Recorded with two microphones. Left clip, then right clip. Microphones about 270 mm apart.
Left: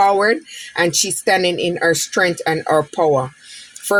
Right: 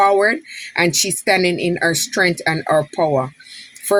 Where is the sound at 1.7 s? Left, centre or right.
Left.